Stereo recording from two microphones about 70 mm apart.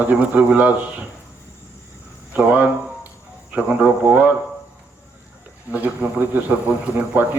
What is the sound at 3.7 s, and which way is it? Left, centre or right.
Speech, right.